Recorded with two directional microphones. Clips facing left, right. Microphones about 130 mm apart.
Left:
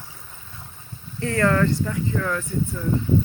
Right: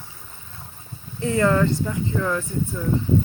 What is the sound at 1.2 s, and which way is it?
Speech, 15° right (ahead or behind).